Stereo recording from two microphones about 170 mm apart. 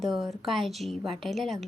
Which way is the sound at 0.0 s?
Centre (ahead or behind).